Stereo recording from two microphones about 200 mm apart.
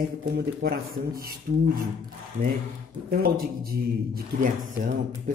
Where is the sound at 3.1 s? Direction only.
50° right (ahead or behind).